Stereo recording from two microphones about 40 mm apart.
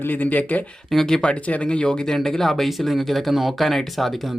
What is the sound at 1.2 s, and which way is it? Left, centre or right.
Speech, left.